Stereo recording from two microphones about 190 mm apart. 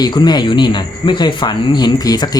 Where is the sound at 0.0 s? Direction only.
25° left (ahead or behind).